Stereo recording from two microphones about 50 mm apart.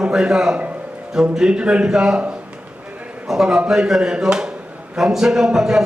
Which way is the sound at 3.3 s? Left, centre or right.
Centre.